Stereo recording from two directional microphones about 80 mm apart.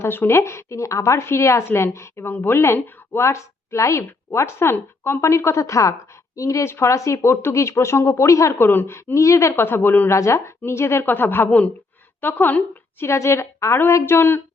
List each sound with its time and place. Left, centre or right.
0.0 s a woman's voice: left